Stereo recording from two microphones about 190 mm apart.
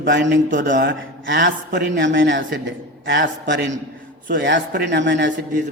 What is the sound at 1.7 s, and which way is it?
Speech, 55° right (ahead or behind).